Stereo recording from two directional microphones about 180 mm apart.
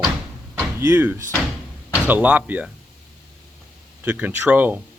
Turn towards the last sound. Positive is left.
turn(degrees=-10)  # may be behind; listen again after turning